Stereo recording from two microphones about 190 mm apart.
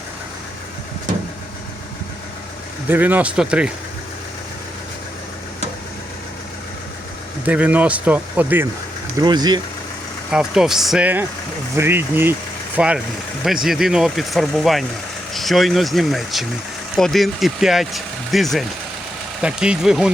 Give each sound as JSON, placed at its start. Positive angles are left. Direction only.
{"t": 2.9, "sound": "speech", "side_deg": -10}
{"t": 7.4, "sound": "speech", "side_deg": -10}
{"t": 9.2, "sound": "speech", "side_deg": -20}
{"t": 10.3, "sound": "speech", "side_deg": -5}